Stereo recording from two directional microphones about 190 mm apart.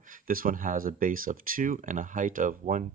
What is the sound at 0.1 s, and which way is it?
Speech, 45° right (ahead or behind).